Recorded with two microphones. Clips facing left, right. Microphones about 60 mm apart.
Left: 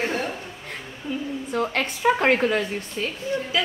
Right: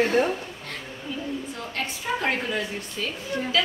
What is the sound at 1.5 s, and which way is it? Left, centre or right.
A woman's voice, left.